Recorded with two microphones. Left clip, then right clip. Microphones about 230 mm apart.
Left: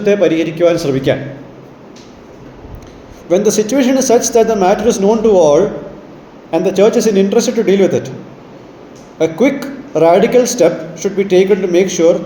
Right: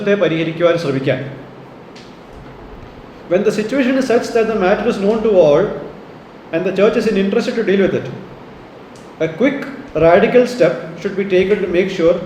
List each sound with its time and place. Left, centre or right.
0.0 s speech: left
3.2 s speech: left
9.1 s a man's voice: left